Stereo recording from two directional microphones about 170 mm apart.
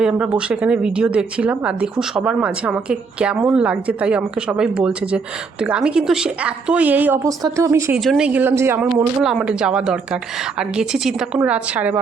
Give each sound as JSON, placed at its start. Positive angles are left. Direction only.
{"t": 0.0, "sound": "a woman's voice", "side_deg": -5}
{"t": 7.9, "sound": "a woman's voice", "side_deg": 0}